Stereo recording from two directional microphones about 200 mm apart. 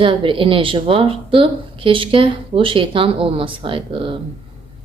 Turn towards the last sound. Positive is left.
turn(degrees=-25)  # may be behind; listen again after turning